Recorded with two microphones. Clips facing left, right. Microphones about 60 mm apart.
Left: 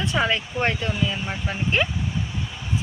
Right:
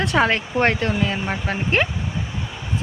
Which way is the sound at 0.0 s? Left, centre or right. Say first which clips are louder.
Right 4 dB; right.